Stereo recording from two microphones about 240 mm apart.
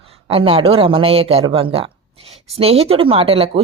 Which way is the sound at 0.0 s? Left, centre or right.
Right.